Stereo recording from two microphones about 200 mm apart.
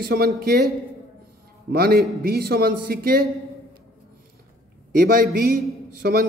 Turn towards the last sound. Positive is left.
turn(degrees=-50)  # may be behind; listen again after turning